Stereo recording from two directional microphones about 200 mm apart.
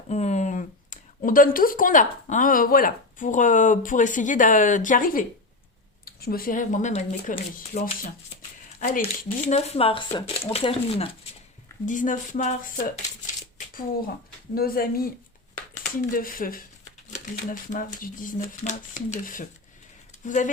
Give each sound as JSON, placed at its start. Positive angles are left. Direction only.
{"t": 0.1, "sound": "speech", "side_deg": 35}
{"t": 11.9, "sound": "speech", "side_deg": 40}
{"t": 14.5, "sound": "speech", "side_deg": 50}
{"t": 16.1, "sound": "speech", "side_deg": 45}